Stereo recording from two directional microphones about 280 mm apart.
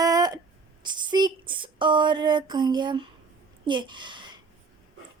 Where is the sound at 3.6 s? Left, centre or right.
Centre.